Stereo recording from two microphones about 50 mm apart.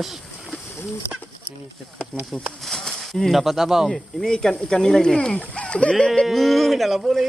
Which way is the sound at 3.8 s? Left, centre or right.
Centre.